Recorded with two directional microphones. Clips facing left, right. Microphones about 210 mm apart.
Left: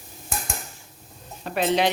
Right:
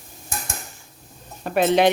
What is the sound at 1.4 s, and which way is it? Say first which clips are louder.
Speech: right 4 dB; 55° right (ahead or behind).